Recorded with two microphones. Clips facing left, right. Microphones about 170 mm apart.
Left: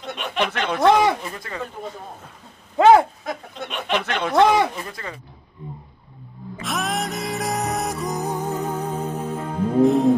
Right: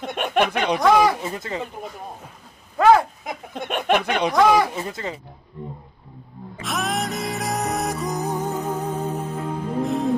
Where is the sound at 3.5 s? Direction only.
50° right (ahead or behind).